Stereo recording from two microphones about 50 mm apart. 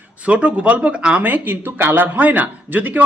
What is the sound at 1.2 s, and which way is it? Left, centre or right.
Speech, right.